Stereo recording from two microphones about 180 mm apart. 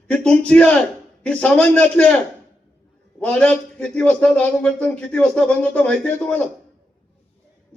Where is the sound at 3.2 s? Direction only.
5° left (ahead or behind).